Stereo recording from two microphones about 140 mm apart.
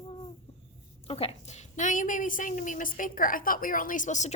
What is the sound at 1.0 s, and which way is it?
A woman's voice, 45° left (ahead or behind).